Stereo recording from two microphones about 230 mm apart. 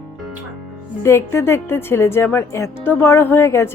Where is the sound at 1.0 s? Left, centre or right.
Centre.